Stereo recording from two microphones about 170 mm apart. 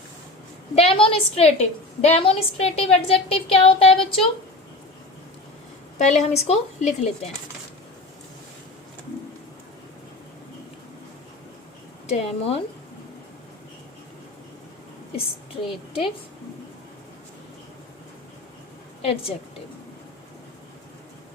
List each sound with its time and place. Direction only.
0.8 s a woman's voice: 35° left (ahead or behind)
6.0 s a woman's voice: 40° left (ahead or behind)
12.0 s a woman's voice: 40° left (ahead or behind)
15.6 s a woman's voice: centre (ahead or behind)
19.0 s a woman's voice: 35° left (ahead or behind)